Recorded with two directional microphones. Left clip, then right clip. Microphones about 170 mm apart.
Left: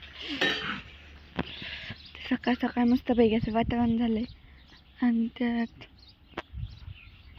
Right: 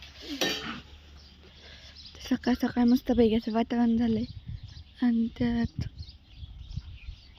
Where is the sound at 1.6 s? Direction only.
5° right (ahead or behind).